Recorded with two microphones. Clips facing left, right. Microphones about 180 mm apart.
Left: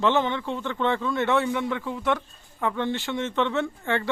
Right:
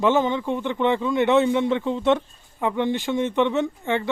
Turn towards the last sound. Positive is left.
turn(degrees=-20)  # may be behind; listen again after turning